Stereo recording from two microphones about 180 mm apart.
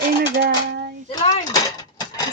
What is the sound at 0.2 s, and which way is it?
Dishes, 60° right (ahead or behind).